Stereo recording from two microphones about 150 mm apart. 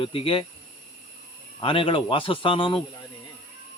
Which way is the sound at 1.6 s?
35° left (ahead or behind).